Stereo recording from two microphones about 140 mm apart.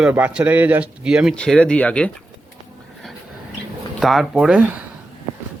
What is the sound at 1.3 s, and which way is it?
Speech, 5° left (ahead or behind).